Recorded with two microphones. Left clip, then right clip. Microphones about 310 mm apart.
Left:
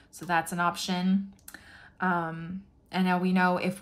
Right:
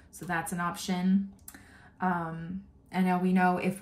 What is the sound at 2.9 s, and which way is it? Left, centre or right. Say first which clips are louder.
Speech: left 1 dB; centre.